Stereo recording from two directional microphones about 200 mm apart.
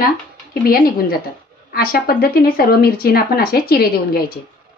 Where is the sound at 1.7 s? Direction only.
50° left (ahead or behind).